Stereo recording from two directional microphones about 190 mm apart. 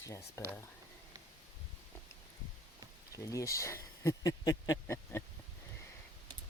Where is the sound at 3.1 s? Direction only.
15° left (ahead or behind).